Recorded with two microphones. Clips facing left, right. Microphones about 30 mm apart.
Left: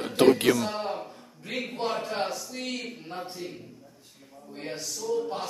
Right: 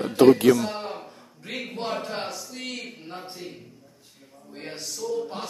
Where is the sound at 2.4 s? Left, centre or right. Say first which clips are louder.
Left 1 dB; centre.